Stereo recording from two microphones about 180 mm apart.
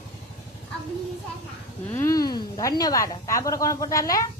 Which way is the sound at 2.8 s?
20° left (ahead or behind).